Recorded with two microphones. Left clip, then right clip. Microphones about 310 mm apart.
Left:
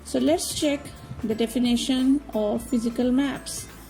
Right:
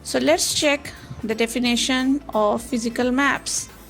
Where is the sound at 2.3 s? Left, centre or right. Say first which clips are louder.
Right 6 dB; right.